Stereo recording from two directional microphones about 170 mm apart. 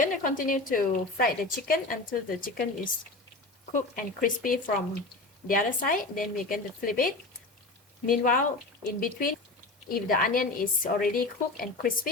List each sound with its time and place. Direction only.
0.0 s a woman's voice: 55° left (ahead or behind)